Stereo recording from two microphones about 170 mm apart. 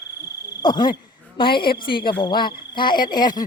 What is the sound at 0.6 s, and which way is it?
Speech, 25° left (ahead or behind).